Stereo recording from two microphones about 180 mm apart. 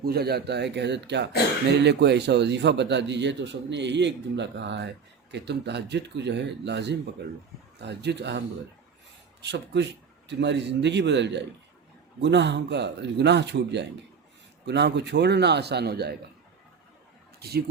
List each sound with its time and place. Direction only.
0.0 s speech: 60° right (ahead or behind)